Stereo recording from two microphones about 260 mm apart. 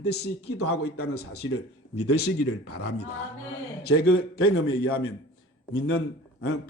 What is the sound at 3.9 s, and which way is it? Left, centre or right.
A man's voice, left.